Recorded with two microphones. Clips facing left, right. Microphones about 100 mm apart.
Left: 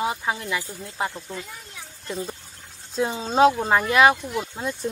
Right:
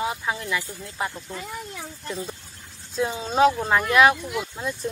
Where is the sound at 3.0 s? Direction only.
20° left (ahead or behind).